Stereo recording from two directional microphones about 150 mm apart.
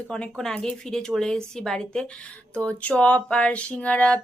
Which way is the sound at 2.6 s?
10° left (ahead or behind).